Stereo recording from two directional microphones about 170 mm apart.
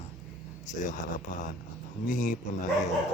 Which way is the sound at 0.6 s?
45° left (ahead or behind).